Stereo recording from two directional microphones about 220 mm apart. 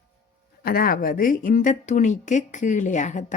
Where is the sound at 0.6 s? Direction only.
45° left (ahead or behind).